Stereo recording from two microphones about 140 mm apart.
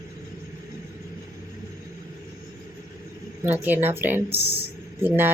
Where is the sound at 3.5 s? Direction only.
15° right (ahead or behind).